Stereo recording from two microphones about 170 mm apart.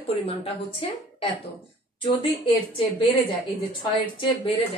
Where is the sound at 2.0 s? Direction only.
30° left (ahead or behind).